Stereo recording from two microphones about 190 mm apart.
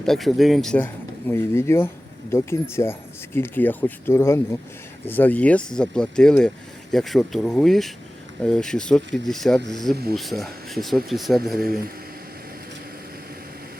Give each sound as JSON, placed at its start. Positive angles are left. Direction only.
{"t": 0.0, "sound": "speech", "side_deg": 0}
{"t": 11.6, "sound": "a man's voice", "side_deg": -50}